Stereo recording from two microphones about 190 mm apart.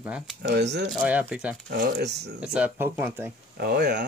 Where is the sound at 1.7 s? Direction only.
55° right (ahead or behind).